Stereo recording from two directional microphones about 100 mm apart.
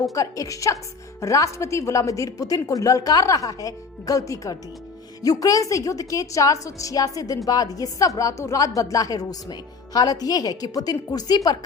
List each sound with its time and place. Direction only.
0.1 s a woman's voice: 35° left (ahead or behind)